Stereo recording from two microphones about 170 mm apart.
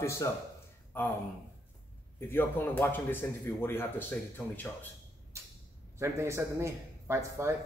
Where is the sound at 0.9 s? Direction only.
10° left (ahead or behind).